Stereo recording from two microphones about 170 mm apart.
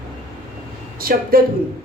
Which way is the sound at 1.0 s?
60° right (ahead or behind).